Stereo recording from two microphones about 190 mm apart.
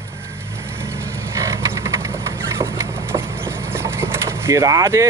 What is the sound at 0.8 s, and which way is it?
Vehicle, 15° right (ahead or behind).